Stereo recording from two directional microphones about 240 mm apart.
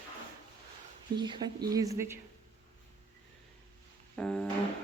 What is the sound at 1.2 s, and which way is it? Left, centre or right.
Speech, centre.